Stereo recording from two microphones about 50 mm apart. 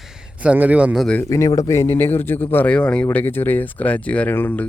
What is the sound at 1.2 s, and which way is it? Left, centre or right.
Speech, left.